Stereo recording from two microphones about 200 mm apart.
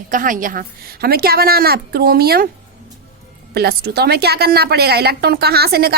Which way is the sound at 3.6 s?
50° right (ahead or behind).